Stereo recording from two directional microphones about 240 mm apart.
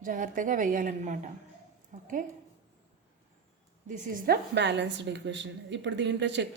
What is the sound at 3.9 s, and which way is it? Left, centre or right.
A woman's voice, right.